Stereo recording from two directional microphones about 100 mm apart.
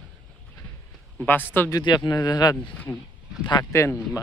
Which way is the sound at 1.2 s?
20° left (ahead or behind).